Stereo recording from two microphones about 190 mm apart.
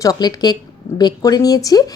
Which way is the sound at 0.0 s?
20° left (ahead or behind).